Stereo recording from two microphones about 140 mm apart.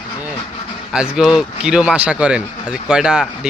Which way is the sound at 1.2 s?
5° right (ahead or behind).